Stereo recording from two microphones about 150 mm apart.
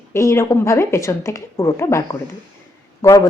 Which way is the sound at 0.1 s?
20° left (ahead or behind).